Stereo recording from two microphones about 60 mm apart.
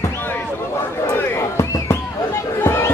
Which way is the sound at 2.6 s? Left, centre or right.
Left.